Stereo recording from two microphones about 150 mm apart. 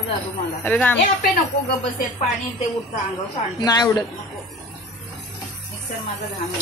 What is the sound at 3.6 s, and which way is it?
Speech, 25° left (ahead or behind).